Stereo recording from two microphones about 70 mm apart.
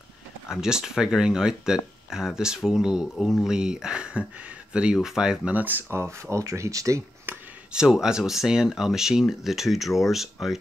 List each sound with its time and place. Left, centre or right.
0.5 s speech: centre
5.5 s speech: right
7.3 s a sound: right
7.7 s speech: centre